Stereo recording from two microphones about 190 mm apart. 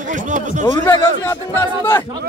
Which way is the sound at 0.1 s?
40° right (ahead or behind).